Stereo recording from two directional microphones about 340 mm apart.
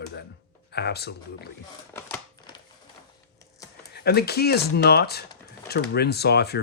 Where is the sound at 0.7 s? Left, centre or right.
Left.